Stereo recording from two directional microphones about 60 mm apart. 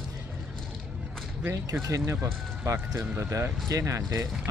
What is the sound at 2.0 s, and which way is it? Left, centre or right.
Speech, right.